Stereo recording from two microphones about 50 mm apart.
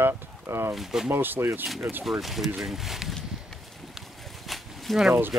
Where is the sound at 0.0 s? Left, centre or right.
Right.